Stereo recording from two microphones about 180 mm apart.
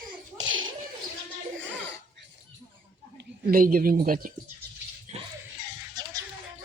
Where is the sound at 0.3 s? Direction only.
90° right.